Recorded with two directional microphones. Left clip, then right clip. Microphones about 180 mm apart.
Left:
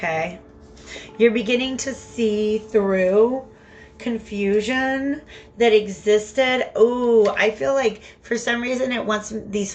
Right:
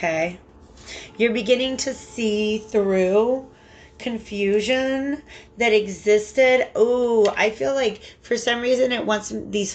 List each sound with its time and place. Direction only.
0.0 s speech: 30° right (ahead or behind)